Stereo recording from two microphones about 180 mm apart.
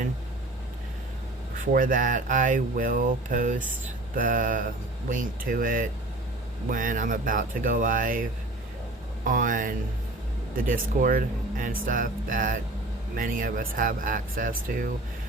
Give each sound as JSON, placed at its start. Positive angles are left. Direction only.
{"t": 1.7, "sound": "speech", "side_deg": -50}